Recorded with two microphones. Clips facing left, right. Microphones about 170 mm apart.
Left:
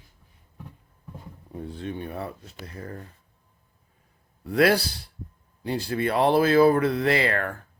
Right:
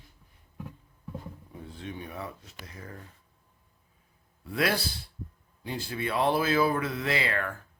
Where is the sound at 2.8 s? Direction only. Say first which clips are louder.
Left 7 dB; 45° left (ahead or behind).